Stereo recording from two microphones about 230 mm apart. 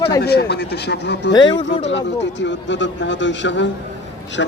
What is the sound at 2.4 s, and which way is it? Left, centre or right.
Speech, left.